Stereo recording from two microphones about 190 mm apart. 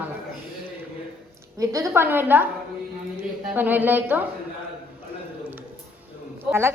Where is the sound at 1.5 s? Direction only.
15° right (ahead or behind).